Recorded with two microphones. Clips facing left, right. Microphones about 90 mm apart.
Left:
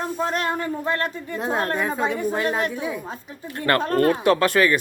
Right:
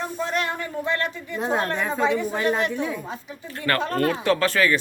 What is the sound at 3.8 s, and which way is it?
Speech, 45° left (ahead or behind).